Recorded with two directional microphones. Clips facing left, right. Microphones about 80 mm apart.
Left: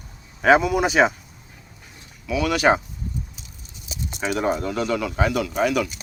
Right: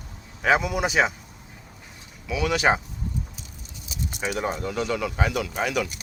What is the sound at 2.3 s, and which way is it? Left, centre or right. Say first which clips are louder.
Speech: left 3 dB; centre.